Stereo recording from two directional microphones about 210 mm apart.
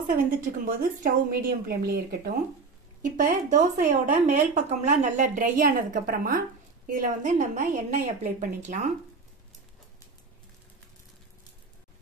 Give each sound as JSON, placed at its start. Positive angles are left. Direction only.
{"t": 0.0, "sound": "a woman's voice", "side_deg": -40}